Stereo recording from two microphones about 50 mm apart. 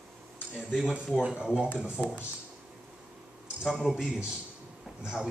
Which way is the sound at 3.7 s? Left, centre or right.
Centre.